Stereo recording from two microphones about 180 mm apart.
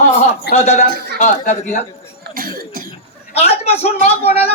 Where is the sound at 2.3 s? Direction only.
55° right (ahead or behind).